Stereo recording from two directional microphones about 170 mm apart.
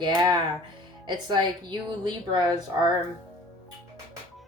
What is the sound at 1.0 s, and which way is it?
Speech, 25° right (ahead or behind).